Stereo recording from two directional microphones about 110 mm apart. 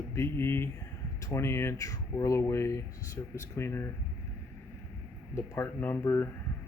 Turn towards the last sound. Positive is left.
turn(degrees=20)  # may be behind; listen again after turning